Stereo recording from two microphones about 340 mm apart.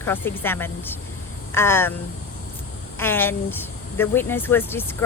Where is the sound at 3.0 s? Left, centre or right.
Centre.